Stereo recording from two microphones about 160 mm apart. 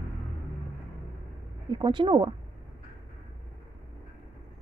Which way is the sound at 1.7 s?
30° right (ahead or behind).